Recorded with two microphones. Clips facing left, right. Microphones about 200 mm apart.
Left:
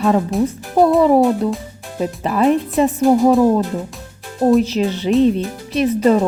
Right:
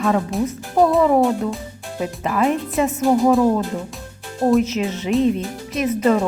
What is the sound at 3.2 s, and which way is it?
Speech, 15° left (ahead or behind).